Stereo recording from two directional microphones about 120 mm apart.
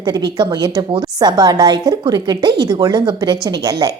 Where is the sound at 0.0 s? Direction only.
35° right (ahead or behind).